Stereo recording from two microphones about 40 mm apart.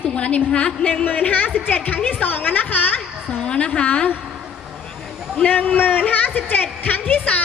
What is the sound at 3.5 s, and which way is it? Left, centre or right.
Speech, left.